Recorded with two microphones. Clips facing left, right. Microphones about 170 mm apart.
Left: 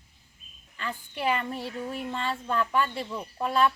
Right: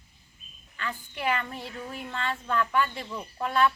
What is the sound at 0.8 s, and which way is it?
Speech, 30° left (ahead or behind).